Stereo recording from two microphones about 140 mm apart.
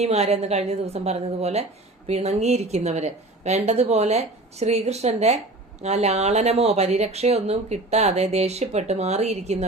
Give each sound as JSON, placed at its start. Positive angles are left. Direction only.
{"t": 0.0, "sound": "speech", "side_deg": -50}